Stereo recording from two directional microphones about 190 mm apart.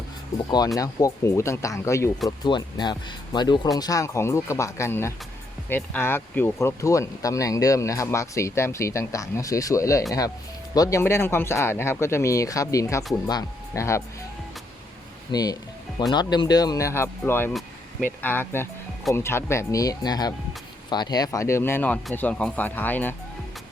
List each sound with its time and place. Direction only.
0.8 s speech: 20° left (ahead or behind)
15.3 s speech: 20° left (ahead or behind)